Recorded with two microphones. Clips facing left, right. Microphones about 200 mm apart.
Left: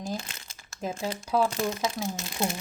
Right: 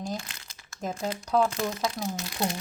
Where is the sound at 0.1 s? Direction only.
25° left (ahead or behind).